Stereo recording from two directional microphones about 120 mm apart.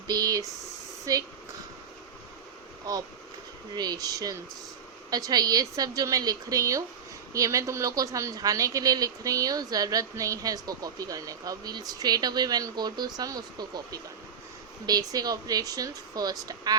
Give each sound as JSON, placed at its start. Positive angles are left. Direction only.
{"t": 0.1, "sound": "speech", "side_deg": -30}
{"t": 2.9, "sound": "speech", "side_deg": -30}